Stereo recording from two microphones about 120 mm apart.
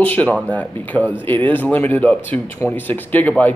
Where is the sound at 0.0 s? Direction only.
15° left (ahead or behind).